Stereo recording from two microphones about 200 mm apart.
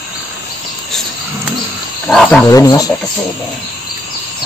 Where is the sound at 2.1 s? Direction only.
5° left (ahead or behind).